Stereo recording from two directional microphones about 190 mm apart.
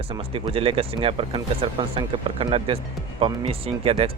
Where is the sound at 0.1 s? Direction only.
30° right (ahead or behind).